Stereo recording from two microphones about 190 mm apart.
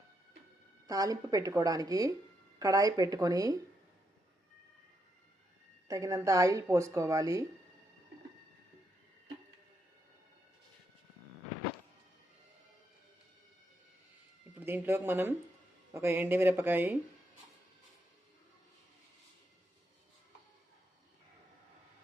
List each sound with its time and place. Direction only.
0.9 s speech: 20° right (ahead or behind)
5.9 s a woman's voice: 15° right (ahead or behind)
14.6 s a woman's voice: 10° right (ahead or behind)